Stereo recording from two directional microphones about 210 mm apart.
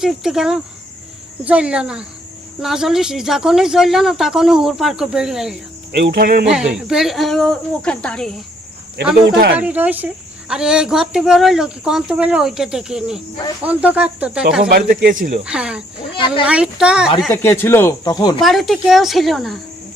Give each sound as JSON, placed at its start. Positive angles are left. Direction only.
{"t": 0.0, "sound": "speech", "side_deg": 0}
{"t": 6.0, "sound": "speech", "side_deg": -45}
{"t": 6.5, "sound": "speech", "side_deg": -5}
{"t": 9.6, "sound": "speech", "side_deg": -5}
{"t": 14.7, "sound": "speech", "side_deg": -45}
{"t": 15.4, "sound": "speech", "side_deg": -5}
{"t": 16.1, "sound": "speech", "side_deg": 25}
{"t": 16.5, "sound": "speech", "side_deg": -5}
{"t": 17.2, "sound": "speech", "side_deg": 5}
{"t": 18.3, "sound": "speech", "side_deg": 0}